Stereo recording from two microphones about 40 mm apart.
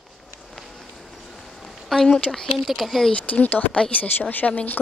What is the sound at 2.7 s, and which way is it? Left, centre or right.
Speech, centre.